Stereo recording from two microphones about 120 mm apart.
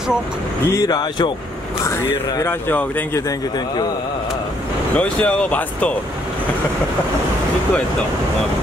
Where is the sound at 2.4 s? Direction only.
20° left (ahead or behind).